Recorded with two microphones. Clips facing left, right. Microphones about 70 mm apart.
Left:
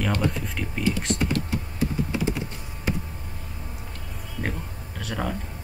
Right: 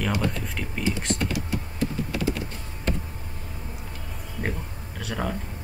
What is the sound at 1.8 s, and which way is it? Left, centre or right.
Typing, centre.